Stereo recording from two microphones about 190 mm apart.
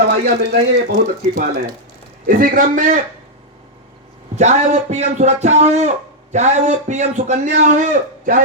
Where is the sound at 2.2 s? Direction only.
50° right (ahead or behind).